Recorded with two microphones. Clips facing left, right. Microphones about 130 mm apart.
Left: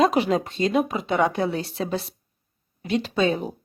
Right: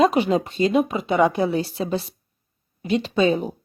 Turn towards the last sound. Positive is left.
turn(degrees=0)  # may be behind; listen again after turning